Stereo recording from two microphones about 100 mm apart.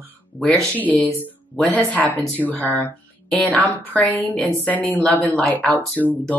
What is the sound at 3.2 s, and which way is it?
Speech, 5° left (ahead or behind).